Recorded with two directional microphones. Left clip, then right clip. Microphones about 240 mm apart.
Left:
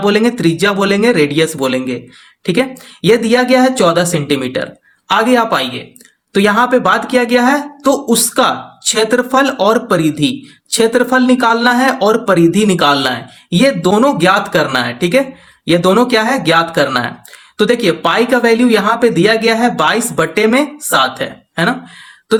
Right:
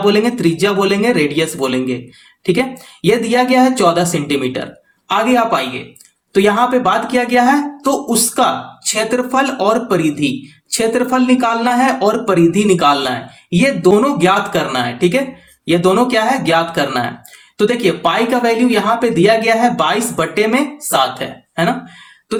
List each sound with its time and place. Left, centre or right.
0.0 s a man's voice: left